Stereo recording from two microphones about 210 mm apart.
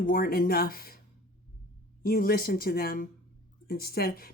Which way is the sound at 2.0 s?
45° left (ahead or behind).